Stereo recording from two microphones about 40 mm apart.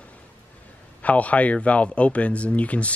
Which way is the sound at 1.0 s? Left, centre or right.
Left.